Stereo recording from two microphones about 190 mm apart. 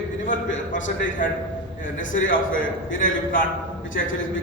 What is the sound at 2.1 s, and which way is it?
A man's voice, 45° left (ahead or behind).